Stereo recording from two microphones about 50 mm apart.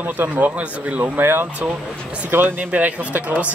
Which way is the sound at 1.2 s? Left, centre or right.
Right.